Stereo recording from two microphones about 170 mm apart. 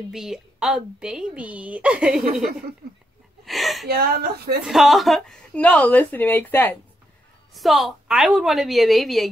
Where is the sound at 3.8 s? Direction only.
65° right (ahead or behind).